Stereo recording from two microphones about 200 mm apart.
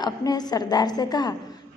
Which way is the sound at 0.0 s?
20° left (ahead or behind).